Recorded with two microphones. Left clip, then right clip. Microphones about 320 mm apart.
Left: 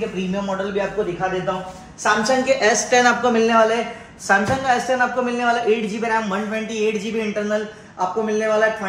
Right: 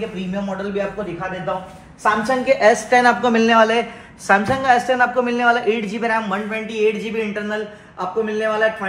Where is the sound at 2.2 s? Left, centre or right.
Right.